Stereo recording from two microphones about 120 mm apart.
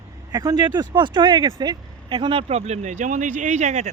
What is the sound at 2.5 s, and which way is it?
Speech, 70° right (ahead or behind).